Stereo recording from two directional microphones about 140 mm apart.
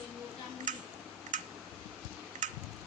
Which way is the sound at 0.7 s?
65° right (ahead or behind).